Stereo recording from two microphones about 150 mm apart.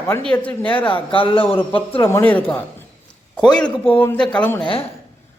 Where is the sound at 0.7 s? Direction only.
35° left (ahead or behind).